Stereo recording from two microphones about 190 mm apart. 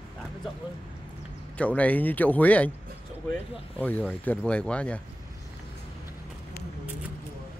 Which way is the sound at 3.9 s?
10° left (ahead or behind).